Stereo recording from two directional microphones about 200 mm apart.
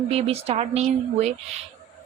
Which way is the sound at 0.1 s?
30° right (ahead or behind).